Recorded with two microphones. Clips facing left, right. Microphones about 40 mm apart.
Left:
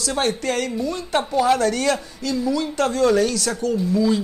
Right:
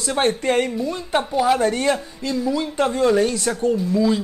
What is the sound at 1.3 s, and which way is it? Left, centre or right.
Speech, centre.